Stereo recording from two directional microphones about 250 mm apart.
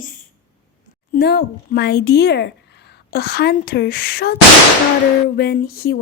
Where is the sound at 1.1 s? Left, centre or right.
Left.